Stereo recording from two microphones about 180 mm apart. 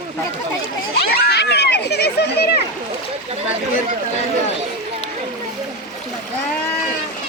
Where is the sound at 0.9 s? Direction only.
60° left (ahead or behind).